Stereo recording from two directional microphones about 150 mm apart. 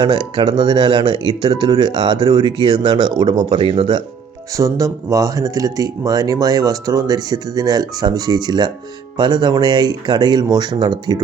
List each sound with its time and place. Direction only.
0.0 s speech: 35° right (ahead or behind)
4.5 s speech: 20° right (ahead or behind)